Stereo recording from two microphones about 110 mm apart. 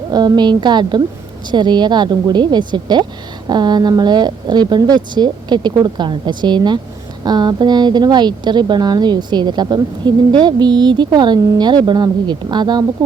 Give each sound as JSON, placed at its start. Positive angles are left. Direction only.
{"t": 0.1, "sound": "a woman's voice", "side_deg": -40}